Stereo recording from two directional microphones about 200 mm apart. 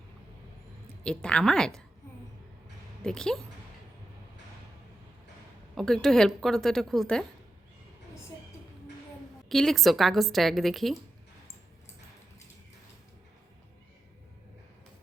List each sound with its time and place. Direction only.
1.0 s a woman's voice: 5° left (ahead or behind)
3.0 s a woman's voice: 5° left (ahead or behind)
5.7 s a woman's voice: centre (ahead or behind)
9.5 s a woman's voice: centre (ahead or behind)